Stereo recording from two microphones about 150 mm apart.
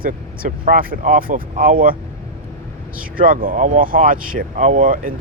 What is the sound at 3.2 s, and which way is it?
Speech, 70° right (ahead or behind).